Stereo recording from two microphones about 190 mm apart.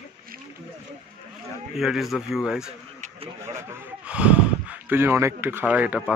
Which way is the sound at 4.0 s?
5° right (ahead or behind).